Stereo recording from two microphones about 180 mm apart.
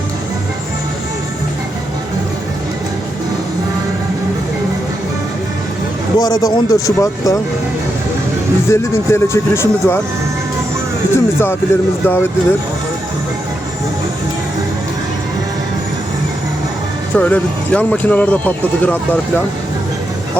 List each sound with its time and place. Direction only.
6.1 s speech: 20° left (ahead or behind)
8.7 s speech: 15° left (ahead or behind)
11.1 s speech: 15° left (ahead or behind)
17.2 s speech: 5° left (ahead or behind)